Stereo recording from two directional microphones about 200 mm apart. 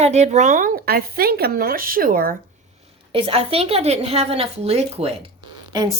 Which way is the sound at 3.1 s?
30° right (ahead or behind).